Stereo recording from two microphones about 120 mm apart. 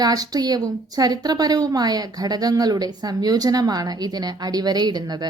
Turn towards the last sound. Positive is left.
turn(degrees=-35)  # may be behind; listen again after turning